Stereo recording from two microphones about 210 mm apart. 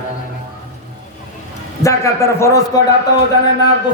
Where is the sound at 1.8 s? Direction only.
15° left (ahead or behind).